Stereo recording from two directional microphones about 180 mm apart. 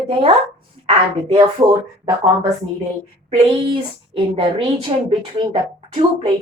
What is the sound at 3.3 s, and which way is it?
A woman's voice, 30° right (ahead or behind).